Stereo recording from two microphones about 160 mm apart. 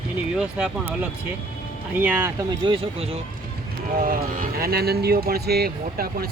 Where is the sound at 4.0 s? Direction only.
60° right (ahead or behind).